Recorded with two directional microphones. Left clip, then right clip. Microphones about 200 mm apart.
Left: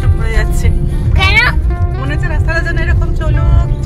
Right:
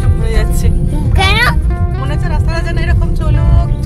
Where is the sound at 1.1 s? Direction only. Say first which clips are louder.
Left 1 dB; 35° right (ahead or behind).